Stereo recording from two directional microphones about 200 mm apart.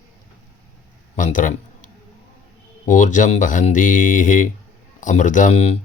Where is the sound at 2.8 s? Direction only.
40° left (ahead or behind).